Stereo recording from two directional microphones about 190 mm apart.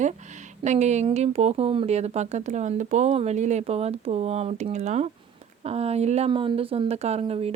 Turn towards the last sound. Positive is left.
turn(degrees=-30)  # may be behind; listen again after turning